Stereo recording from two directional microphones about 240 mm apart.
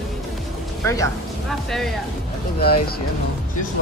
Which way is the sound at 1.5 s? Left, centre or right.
Centre.